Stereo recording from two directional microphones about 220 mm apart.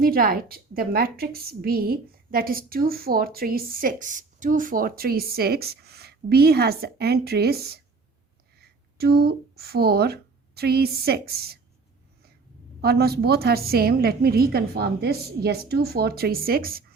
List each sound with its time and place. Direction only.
0.0 s a woman's voice: 40° right (ahead or behind)
12.8 s a woman's voice: 45° right (ahead or behind)